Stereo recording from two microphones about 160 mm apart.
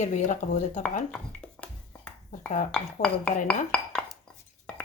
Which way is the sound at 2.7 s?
5° left (ahead or behind).